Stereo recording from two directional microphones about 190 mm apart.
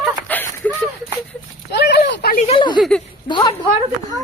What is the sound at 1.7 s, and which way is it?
Clip-clop, 65° left (ahead or behind).